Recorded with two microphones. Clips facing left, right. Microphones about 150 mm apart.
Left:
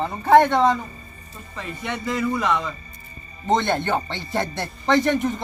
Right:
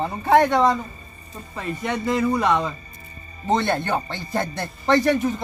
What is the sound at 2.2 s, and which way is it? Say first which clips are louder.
Speech: right 2 dB; 35° right (ahead or behind).